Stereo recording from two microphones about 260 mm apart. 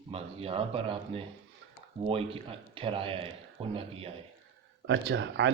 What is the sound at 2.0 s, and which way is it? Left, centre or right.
Speech, right.